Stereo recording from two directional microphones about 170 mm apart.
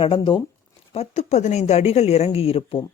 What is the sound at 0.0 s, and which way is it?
Speech, 30° left (ahead or behind).